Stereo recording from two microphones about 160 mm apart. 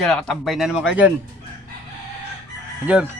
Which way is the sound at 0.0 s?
5° left (ahead or behind).